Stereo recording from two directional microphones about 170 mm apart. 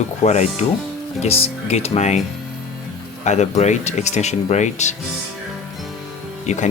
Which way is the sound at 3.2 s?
40° left (ahead or behind).